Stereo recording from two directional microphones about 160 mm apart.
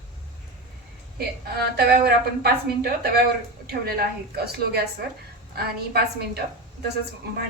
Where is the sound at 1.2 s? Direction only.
80° right.